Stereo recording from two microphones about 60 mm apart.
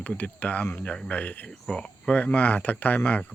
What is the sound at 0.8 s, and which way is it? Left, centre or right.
Speech, centre.